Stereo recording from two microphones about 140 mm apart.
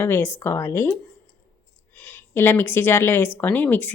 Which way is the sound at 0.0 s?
15° left (ahead or behind).